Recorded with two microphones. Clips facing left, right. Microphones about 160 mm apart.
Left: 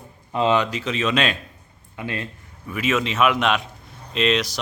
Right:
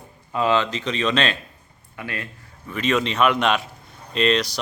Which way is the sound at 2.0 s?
25° left (ahead or behind).